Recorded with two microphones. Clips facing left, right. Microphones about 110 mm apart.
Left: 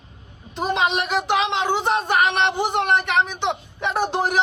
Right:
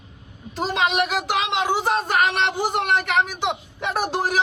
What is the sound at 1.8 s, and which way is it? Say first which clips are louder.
Speech: left 1 dB; 20° left (ahead or behind).